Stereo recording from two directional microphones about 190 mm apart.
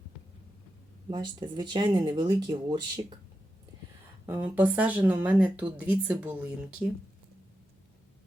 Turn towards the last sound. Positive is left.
turn(degrees=-5)  # may be behind; listen again after turning